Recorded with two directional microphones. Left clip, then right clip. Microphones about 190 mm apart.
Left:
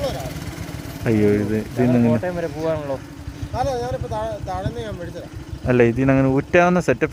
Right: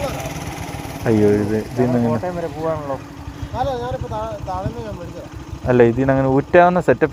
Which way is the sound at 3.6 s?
45° left (ahead or behind).